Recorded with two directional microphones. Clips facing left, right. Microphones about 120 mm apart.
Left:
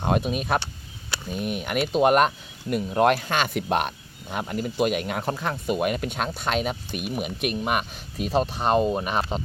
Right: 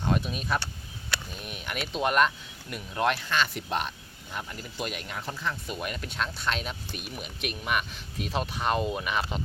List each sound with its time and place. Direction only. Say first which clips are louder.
0.0 s speech: left 5 dB; 55° left (ahead or behind); by 9.4 s 40° left (ahead or behind)